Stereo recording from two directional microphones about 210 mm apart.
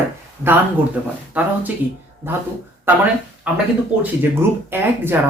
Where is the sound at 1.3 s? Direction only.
5° right (ahead or behind).